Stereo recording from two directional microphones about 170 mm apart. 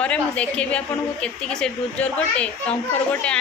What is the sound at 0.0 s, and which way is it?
A woman's voice, 5° left (ahead or behind).